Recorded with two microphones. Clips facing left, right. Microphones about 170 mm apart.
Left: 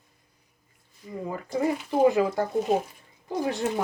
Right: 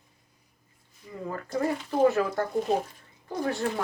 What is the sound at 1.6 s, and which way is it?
Speech, 15° left (ahead or behind).